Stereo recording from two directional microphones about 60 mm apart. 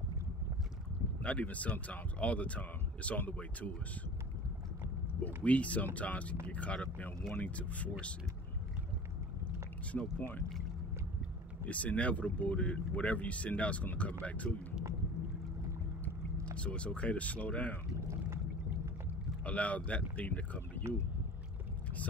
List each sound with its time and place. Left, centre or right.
1.2 s speech: left
5.2 s speech: left
10.1 s speech: left
11.6 s speech: left
16.5 s speech: centre
19.4 s speech: left
20.8 s speech: right